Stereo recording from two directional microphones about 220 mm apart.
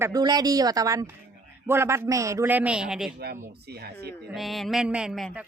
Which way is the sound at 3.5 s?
45° right (ahead or behind).